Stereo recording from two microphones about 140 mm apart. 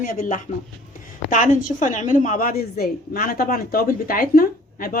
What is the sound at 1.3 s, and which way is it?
A woman's voice, 65° left (ahead or behind).